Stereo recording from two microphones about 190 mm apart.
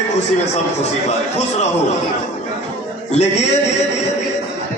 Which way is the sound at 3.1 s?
35° left (ahead or behind).